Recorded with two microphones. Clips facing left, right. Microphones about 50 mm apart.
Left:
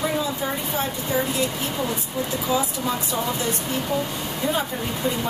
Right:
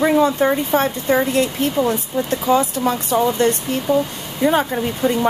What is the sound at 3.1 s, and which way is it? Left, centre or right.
Speech, right.